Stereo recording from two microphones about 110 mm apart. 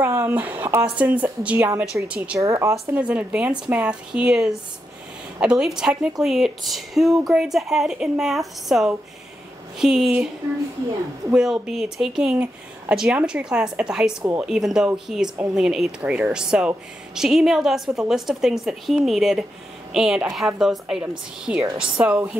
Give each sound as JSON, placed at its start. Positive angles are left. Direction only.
{"t": 0.0, "sound": "a woman's voice", "side_deg": -20}
{"t": 2.4, "sound": "speech", "side_deg": -30}
{"t": 3.0, "sound": "a woman's voice", "side_deg": -10}
{"t": 11.3, "sound": "a woman's voice", "side_deg": -5}